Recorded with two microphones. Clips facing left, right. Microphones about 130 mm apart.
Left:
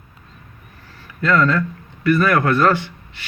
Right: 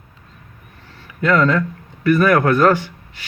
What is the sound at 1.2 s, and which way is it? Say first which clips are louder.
Speech: right 1 dB; 15° right (ahead or behind).